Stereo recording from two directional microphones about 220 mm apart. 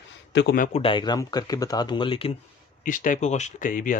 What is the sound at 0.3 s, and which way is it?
Speech, 50° left (ahead or behind).